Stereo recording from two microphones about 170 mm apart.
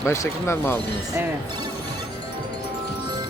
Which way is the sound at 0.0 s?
15° left (ahead or behind).